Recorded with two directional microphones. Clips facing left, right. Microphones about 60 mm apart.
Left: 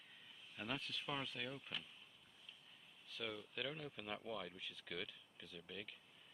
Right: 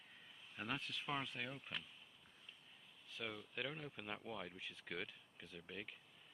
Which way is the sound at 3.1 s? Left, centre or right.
Centre.